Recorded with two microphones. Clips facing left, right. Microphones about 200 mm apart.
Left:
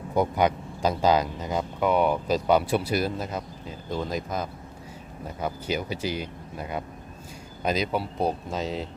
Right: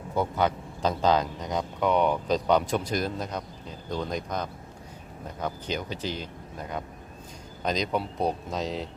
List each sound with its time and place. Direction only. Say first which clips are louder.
0.1 s speech: left 3 dB; 15° left (ahead or behind)